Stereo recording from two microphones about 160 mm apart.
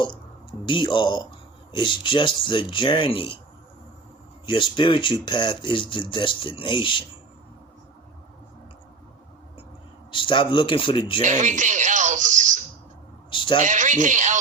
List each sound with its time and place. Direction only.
0.6 s speech: 30° left (ahead or behind)
4.4 s speech: 30° left (ahead or behind)
10.1 s speech: 30° left (ahead or behind)
11.2 s speech: 50° right (ahead or behind)
13.3 s a sound: 30° left (ahead or behind)
13.6 s speech: 50° right (ahead or behind)